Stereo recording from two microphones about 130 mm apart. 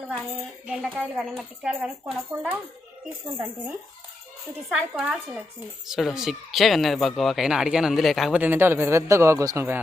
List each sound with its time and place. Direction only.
0.7 s speech: 5° right (ahead or behind)
2.3 s speech: 15° right (ahead or behind)
4.7 s speech: 5° right (ahead or behind)
8.4 s a man's voice: 15° right (ahead or behind)